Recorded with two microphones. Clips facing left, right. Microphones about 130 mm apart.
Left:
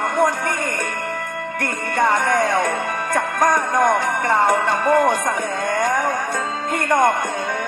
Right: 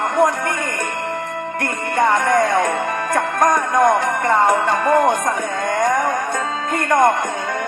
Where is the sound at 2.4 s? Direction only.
Centre (ahead or behind).